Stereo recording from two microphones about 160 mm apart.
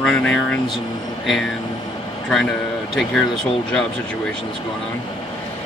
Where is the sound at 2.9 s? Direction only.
5° left (ahead or behind).